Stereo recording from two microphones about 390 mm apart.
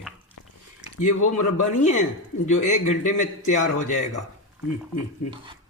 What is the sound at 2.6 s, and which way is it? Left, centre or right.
A man's voice, centre.